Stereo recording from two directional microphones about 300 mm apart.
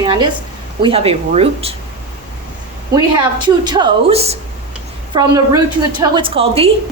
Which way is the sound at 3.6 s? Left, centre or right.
Centre.